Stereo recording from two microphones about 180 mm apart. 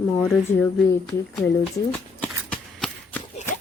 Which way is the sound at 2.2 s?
10° left (ahead or behind).